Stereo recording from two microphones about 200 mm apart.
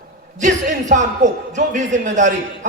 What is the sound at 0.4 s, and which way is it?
A man's voice, 35° right (ahead or behind).